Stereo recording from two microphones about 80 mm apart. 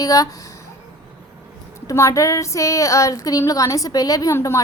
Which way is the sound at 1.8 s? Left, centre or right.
Left.